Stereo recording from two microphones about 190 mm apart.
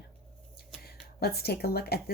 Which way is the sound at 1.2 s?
55° left (ahead or behind).